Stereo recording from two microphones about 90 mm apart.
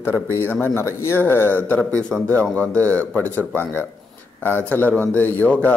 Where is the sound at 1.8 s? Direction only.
10° left (ahead or behind).